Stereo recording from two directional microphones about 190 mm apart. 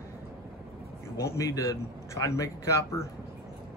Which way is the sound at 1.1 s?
15° left (ahead or behind).